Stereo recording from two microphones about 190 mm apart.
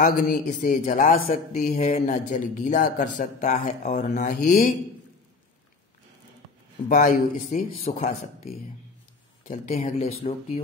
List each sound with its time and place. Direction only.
0.0 s speech: 45° left (ahead or behind)
6.9 s speech: 45° left (ahead or behind)
9.5 s speech: 35° left (ahead or behind)